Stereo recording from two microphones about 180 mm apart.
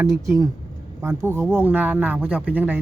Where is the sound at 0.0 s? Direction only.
15° right (ahead or behind).